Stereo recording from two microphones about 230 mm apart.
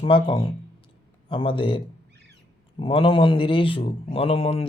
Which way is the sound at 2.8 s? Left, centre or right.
Left.